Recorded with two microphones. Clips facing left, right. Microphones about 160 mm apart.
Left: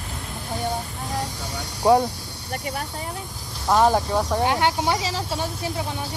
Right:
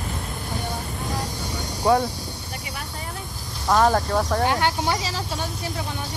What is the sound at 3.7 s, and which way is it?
Speech, 15° left (ahead or behind).